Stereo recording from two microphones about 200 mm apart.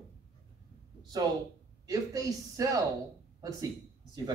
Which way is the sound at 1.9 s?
15° right (ahead or behind).